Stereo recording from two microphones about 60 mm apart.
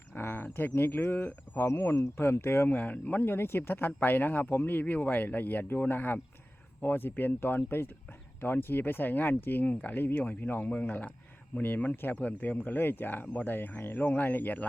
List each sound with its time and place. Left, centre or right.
0.1 s speech: left
2.7 s speech: left